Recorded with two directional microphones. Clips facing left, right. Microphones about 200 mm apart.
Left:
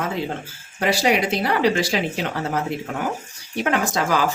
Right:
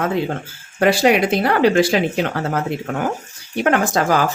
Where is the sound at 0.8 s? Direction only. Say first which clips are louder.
Right 5 dB; 55° right (ahead or behind).